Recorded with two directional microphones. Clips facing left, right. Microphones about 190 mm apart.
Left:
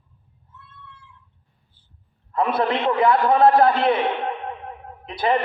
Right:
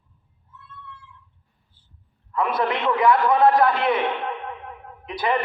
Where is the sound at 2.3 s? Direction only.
30° left (ahead or behind).